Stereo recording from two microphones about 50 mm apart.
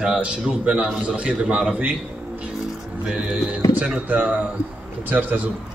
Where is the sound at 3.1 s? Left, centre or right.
Right.